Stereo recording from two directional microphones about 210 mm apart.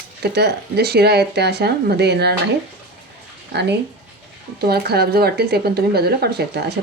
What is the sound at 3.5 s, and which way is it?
Speech, 55° right (ahead or behind).